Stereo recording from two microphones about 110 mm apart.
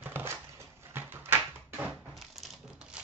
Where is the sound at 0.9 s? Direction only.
20° right (ahead or behind).